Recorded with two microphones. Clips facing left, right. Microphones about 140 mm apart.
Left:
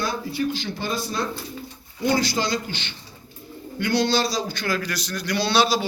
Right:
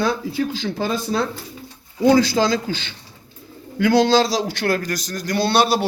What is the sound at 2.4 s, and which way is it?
Speech, 90° right.